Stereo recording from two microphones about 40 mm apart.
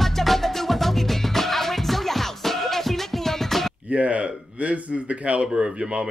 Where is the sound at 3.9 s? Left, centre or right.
Right.